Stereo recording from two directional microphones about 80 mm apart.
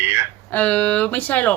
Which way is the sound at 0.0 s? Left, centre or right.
Right.